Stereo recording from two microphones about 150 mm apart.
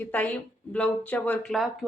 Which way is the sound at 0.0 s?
10° left (ahead or behind).